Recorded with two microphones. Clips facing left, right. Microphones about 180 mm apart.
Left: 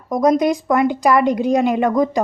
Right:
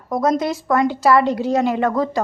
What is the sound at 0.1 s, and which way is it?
A woman's voice, 15° left (ahead or behind).